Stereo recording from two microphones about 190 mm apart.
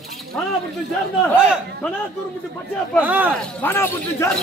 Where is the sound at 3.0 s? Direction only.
10° right (ahead or behind).